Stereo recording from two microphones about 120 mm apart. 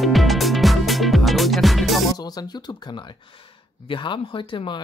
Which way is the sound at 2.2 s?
35° left (ahead or behind).